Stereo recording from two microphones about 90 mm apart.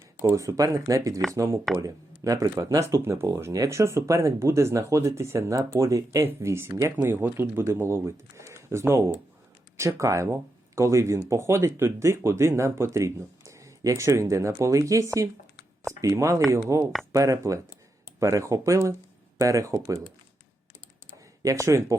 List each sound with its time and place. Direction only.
0.2 s speech: 35° right (ahead or behind)
21.4 s speech: 35° right (ahead or behind)